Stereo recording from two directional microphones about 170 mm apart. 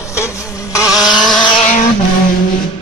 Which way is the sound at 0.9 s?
5° right (ahead or behind).